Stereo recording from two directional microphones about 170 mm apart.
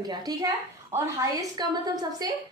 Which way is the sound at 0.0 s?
25° right (ahead or behind).